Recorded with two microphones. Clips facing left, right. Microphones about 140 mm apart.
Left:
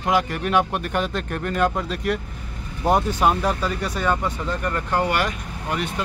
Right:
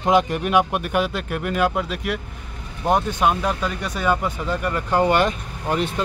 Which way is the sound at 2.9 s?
10° left (ahead or behind).